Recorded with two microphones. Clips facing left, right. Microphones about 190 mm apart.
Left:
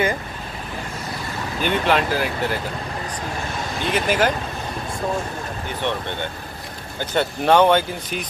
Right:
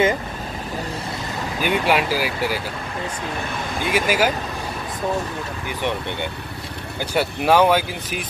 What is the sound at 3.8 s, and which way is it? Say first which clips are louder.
Speech: even; 10° right (ahead or behind).